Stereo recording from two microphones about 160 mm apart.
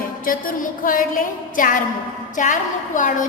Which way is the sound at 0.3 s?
60° left (ahead or behind).